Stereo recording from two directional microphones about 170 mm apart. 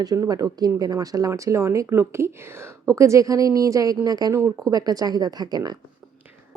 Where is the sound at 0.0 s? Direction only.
20° right (ahead or behind).